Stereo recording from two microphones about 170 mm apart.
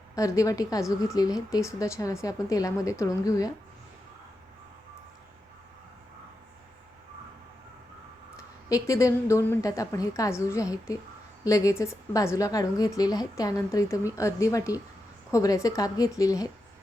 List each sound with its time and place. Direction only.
0.2 s a woman's voice: 20° left (ahead or behind)
8.7 s a woman's voice: 20° left (ahead or behind)